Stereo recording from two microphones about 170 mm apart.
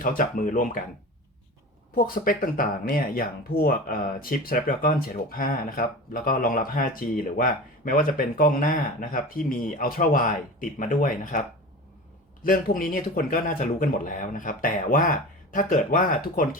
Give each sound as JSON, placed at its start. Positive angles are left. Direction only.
{"t": 0.0, "sound": "speech", "side_deg": 55}
{"t": 2.0, "sound": "speech", "side_deg": 55}